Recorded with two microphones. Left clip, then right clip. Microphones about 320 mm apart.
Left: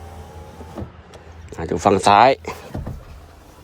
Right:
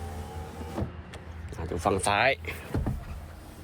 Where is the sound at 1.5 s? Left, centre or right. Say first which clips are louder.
Left 11 dB; left.